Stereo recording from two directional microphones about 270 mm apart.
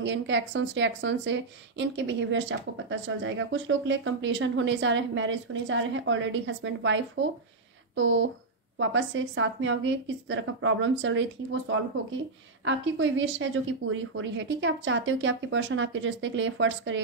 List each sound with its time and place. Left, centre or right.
0.0 s a woman's voice: right
12.6 s speech: right